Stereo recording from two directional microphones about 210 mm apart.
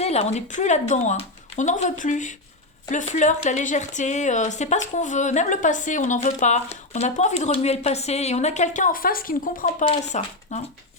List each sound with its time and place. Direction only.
0.0 s speech: 30° left (ahead or behind)
9.8 s speech: 30° left (ahead or behind)